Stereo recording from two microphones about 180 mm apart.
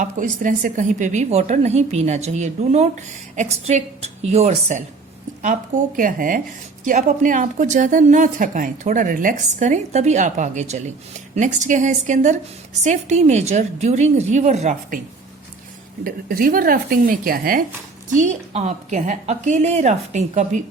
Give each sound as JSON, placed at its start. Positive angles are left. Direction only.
{"t": 0.0, "sound": "a woman's voice", "side_deg": -45}
{"t": 16.0, "sound": "speech", "side_deg": -55}
{"t": 18.1, "sound": "a woman's voice", "side_deg": -40}